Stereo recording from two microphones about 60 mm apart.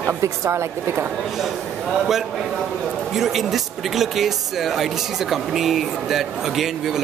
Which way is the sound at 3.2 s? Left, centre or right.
Centre.